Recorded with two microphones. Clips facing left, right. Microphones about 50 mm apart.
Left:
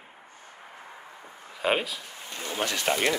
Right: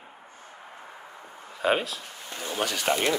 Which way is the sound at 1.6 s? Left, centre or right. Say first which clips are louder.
Right 1 dB; centre.